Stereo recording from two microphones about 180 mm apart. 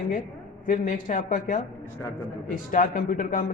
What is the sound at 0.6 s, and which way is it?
Speech, 45° left (ahead or behind).